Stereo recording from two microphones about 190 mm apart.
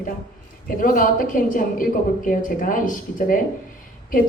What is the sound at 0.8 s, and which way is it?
A woman's voice, 45° left (ahead or behind).